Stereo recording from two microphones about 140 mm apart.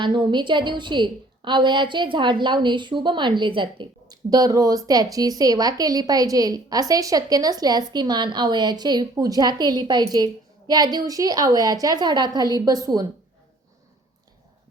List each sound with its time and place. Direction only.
0.0 s a woman's voice: 35° right (ahead or behind)